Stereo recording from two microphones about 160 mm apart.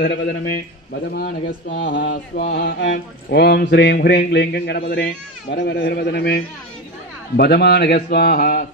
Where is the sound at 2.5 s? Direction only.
90° left.